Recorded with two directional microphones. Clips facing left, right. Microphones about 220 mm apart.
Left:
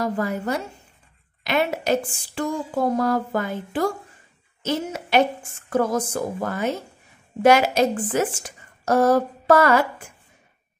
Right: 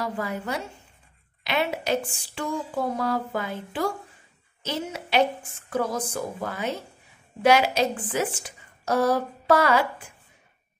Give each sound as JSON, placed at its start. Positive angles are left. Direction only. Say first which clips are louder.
{"t": 0.0, "sound": "a woman's voice", "louder": "left 5 dB", "side_deg": 45}